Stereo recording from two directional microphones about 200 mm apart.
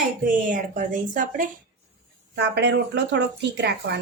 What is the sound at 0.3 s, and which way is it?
Speech, 40° right (ahead or behind).